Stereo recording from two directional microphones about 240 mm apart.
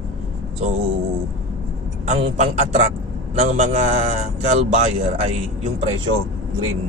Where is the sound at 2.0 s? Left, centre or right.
Right.